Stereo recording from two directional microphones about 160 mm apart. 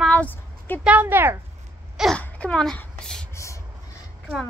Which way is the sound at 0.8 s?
10° right (ahead or behind).